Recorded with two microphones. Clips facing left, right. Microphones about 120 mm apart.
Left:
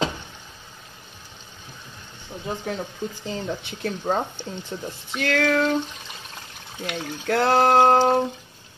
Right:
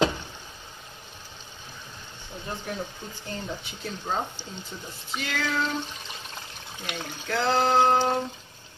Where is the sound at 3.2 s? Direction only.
80° left; by 5.5 s 60° left (ahead or behind).